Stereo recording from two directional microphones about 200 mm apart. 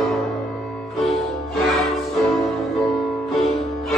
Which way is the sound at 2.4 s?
Centre (ahead or behind).